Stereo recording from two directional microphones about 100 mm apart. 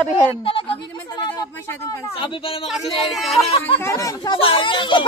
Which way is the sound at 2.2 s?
65° left (ahead or behind).